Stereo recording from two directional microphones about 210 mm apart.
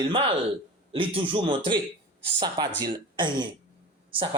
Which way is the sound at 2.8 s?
20° right (ahead or behind).